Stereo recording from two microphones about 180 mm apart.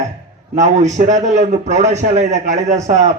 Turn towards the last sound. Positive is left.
turn(degrees=-40)  # may be behind; listen again after turning